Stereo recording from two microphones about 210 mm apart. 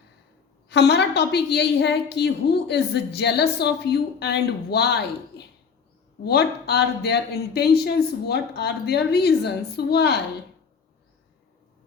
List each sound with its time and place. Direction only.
0.7 s a woman's voice: 55° left (ahead or behind)
6.2 s a woman's voice: 50° left (ahead or behind)